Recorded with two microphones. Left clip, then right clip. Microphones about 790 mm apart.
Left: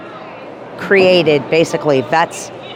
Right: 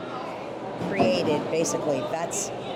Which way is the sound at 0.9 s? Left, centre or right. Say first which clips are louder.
Left 14 dB; left.